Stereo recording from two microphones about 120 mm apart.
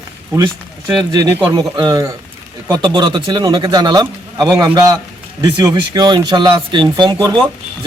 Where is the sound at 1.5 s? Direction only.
35° right (ahead or behind).